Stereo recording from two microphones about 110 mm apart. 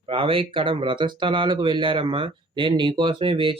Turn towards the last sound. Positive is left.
turn(degrees=-55)  # may be behind; listen again after turning